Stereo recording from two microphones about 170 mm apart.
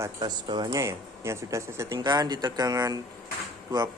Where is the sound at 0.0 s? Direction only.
25° right (ahead or behind).